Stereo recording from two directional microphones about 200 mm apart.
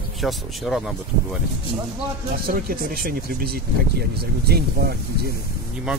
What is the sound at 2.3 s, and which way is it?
Speech, 45° right (ahead or behind).